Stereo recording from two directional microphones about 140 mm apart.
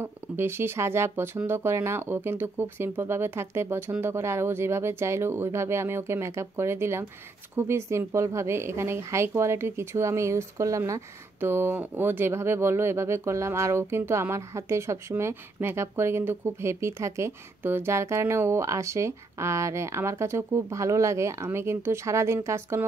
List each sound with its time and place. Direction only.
0.0 s a woman's voice: 15° right (ahead or behind)